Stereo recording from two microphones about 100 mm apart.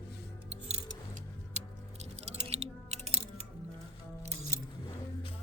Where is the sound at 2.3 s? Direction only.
90° right.